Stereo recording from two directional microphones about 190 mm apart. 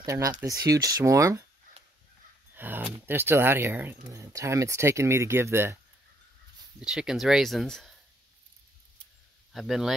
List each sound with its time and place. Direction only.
0.0 s speech: 15° right (ahead or behind)
2.5 s speech: 10° right (ahead or behind)
6.8 s speech: 5° right (ahead or behind)
9.5 s speech: centre (ahead or behind)